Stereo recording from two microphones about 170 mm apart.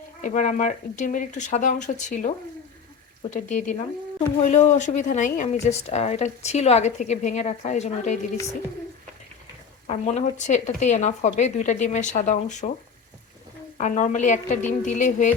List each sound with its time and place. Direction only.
0.2 s a woman's voice: 50° left (ahead or behind)
9.8 s a woman's voice: 40° left (ahead or behind)
13.7 s a woman's voice: 45° left (ahead or behind)